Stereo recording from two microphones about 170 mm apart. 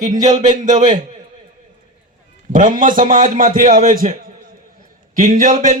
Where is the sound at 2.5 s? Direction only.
50° right (ahead or behind).